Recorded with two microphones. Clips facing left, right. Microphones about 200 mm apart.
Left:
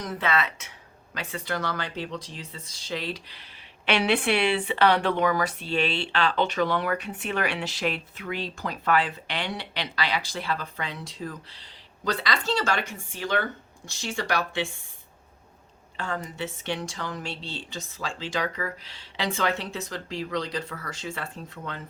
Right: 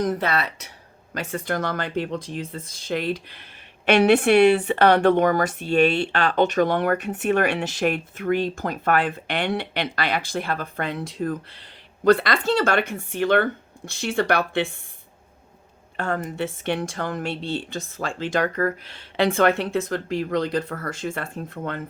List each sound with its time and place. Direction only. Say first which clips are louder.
0.0 s speech: right 4 dB; 45° right (ahead or behind)
1.1 s speech: right 5 dB; 45° right (ahead or behind)
16.0 s speech: right 6 dB; 55° right (ahead or behind)